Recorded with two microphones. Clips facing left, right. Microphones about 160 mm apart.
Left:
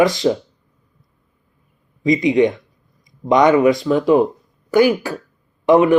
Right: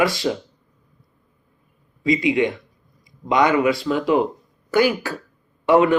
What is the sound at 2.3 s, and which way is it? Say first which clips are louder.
A man's voice: left 5 dB; 20° left (ahead or behind).